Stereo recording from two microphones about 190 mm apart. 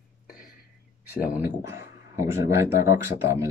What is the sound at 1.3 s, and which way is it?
Speech, 15° right (ahead or behind).